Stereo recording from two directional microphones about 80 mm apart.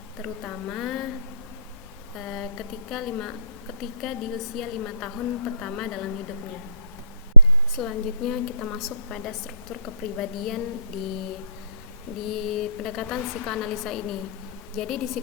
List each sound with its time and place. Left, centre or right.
0.2 s speech: centre
2.1 s a woman's voice: centre
7.8 s a woman's voice: centre
12.2 s a woman's voice: centre